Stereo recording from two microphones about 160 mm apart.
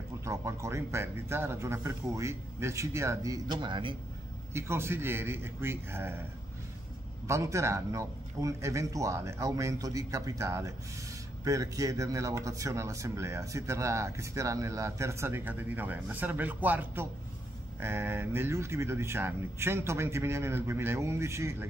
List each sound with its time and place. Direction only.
0.2 s speech: 20° right (ahead or behind)
4.6 s speech: 15° right (ahead or behind)
7.2 s speech: 20° right (ahead or behind)